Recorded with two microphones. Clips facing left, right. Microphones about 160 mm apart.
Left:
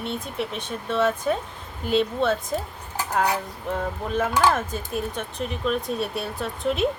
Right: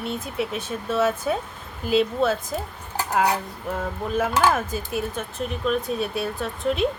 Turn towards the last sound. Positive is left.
turn(degrees=0)  # may be behind; listen again after turning